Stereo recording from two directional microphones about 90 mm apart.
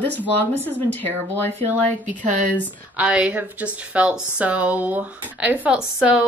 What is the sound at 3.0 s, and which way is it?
Speech, 10° right (ahead or behind).